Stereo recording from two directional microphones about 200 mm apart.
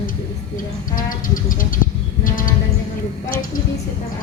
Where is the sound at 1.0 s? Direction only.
45° left (ahead or behind).